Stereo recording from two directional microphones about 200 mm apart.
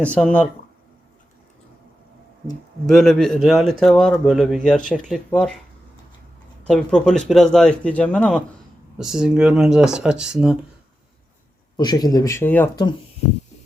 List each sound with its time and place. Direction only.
0.0 s speech: 5° left (ahead or behind)
2.9 s a man's voice: centre (ahead or behind)
6.7 s a man's voice: 5° left (ahead or behind)
11.8 s speech: 20° left (ahead or behind)